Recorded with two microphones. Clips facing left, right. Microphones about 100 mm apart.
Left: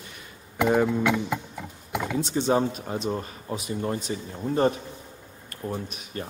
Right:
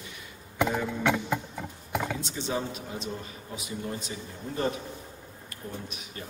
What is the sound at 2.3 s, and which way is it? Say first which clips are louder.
A man's voice: left 9 dB; 50° left (ahead or behind).